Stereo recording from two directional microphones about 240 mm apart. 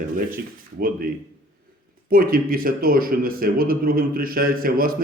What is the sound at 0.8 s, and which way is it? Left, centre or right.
Speech, right.